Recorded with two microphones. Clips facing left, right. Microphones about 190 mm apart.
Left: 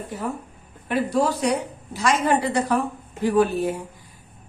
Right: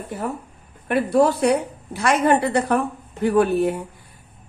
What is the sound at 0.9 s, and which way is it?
A woman's voice, 55° right (ahead or behind).